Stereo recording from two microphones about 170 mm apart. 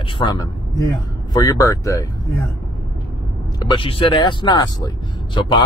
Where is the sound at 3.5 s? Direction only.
25° left (ahead or behind).